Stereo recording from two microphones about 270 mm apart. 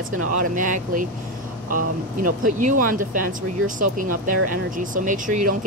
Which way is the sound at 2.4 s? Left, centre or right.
Right.